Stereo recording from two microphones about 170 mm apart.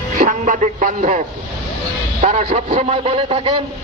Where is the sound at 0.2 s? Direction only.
50° right (ahead or behind).